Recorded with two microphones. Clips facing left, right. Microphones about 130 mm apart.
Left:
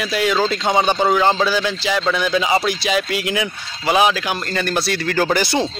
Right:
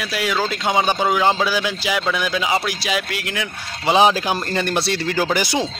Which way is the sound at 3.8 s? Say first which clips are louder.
Right 1 dB; 25° right (ahead or behind).